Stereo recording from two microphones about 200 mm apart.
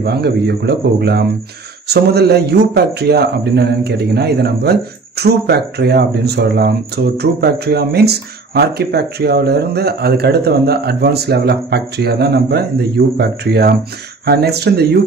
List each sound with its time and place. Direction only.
0.0 s speech: 55° right (ahead or behind)